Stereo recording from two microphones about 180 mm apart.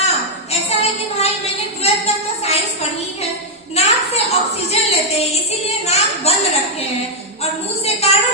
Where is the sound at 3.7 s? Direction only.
35° left (ahead or behind).